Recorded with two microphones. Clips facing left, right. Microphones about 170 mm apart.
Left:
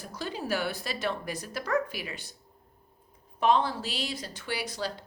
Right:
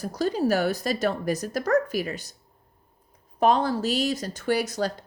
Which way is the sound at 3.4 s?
40° right (ahead or behind).